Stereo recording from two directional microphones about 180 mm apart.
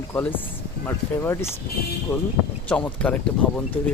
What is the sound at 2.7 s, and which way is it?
Speech, 5° left (ahead or behind).